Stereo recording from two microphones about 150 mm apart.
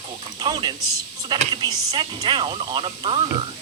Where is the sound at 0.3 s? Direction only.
30° right (ahead or behind).